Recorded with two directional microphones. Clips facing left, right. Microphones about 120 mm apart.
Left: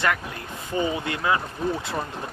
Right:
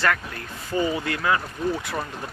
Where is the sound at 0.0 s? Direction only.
20° left (ahead or behind).